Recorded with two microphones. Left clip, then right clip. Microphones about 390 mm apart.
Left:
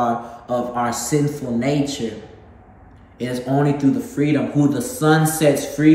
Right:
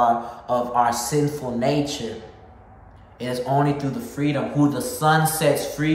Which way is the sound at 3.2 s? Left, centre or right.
Centre.